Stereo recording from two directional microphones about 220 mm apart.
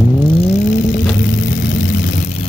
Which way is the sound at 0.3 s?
30° left (ahead or behind).